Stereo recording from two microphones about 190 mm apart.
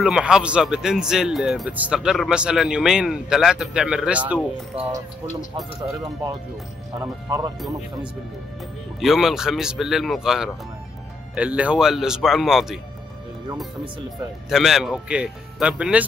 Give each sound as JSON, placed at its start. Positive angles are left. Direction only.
{"t": 0.0, "sound": "a man's voice", "side_deg": -5}
{"t": 7.0, "sound": "speech", "side_deg": -20}
{"t": 9.0, "sound": "a man's voice", "side_deg": 0}
{"t": 14.5, "sound": "a man's voice", "side_deg": 0}